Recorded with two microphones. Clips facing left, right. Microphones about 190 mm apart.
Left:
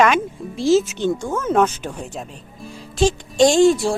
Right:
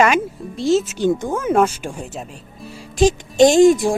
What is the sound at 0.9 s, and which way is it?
Speech, 15° right (ahead or behind).